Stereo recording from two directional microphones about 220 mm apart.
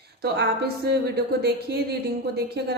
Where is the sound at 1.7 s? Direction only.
50° right (ahead or behind).